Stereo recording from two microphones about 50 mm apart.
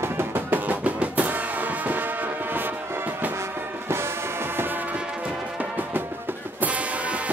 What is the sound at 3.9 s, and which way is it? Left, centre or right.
Music, right.